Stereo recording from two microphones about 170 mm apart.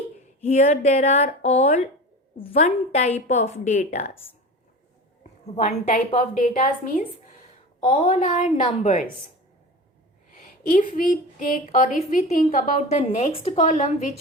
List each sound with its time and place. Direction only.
0.4 s a woman's voice: 40° left (ahead or behind)
5.6 s a woman's voice: 40° left (ahead or behind)
7.9 s a woman's voice: 45° left (ahead or behind)
10.3 s a woman's voice: 50° left (ahead or behind)